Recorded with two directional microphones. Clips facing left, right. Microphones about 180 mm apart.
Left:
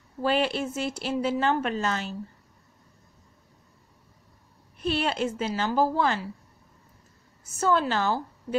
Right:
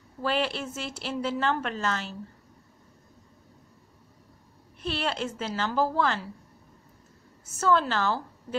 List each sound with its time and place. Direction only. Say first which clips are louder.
0.2 s a woman's voice: left 3 dB; 15° left (ahead or behind)
4.8 s a woman's voice: left 4 dB; 15° left (ahead or behind)
7.5 s a woman's voice: even; 15° left (ahead or behind)